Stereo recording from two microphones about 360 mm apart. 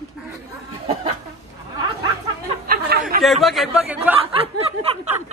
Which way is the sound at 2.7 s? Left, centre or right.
Right.